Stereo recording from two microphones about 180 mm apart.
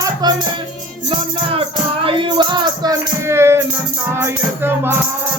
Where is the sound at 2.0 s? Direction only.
25° right (ahead or behind).